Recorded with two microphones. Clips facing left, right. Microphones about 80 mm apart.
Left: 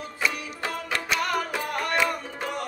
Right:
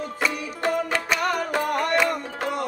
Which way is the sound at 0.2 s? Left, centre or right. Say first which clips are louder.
Right 3 dB; right.